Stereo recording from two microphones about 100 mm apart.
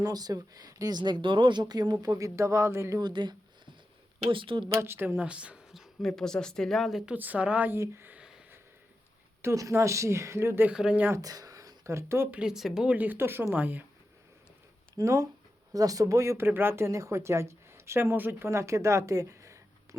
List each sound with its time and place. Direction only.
0.0 s speech: 40° right (ahead or behind)
3.0 s speech: 50° right (ahead or behind)
4.3 s a woman's voice: 60° right (ahead or behind)
4.8 s a woman's voice: 20° right (ahead or behind); by 7.1 s centre (ahead or behind)
7.1 s speech: 15° right (ahead or behind)
8.1 s a sound: 15° right (ahead or behind)
9.4 s speech: 30° right (ahead or behind)
10.7 s speech: 10° right (ahead or behind)
11.1 s speech: 35° right (ahead or behind)
12.3 s speech: 10° right (ahead or behind)
14.9 s a woman's voice: 30° right (ahead or behind)